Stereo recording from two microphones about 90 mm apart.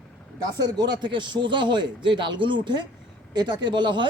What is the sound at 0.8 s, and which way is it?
Speech, 60° right (ahead or behind).